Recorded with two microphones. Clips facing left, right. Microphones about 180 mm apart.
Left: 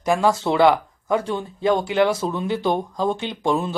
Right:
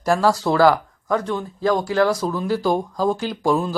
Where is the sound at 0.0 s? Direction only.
20° left (ahead or behind).